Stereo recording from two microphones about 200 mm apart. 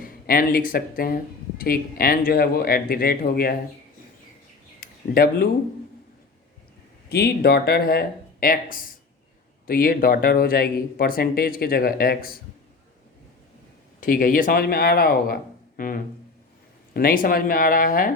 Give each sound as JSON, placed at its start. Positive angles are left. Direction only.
{"t": 0.0, "sound": "speech", "side_deg": 45}
{"t": 5.1, "sound": "speech", "side_deg": 50}
{"t": 7.1, "sound": "speech", "side_deg": 55}
{"t": 14.0, "sound": "speech", "side_deg": 45}